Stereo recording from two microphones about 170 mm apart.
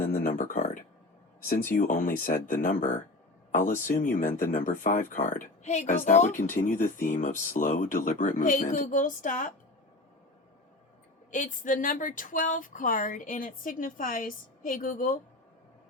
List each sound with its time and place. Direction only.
0.0 s a sound: 55° left (ahead or behind)
1.7 s speech: 50° left (ahead or behind)
11.3 s speech: 50° left (ahead or behind)